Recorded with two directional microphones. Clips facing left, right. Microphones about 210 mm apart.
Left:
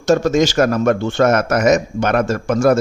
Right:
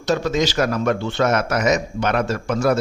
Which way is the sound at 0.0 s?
45° left (ahead or behind).